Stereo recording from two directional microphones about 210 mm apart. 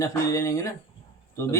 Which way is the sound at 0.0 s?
15° left (ahead or behind).